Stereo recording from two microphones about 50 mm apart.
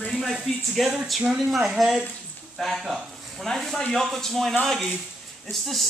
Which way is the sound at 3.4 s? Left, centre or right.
Centre.